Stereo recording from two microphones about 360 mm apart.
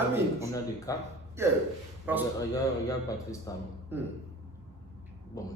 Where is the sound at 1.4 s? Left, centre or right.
Centre.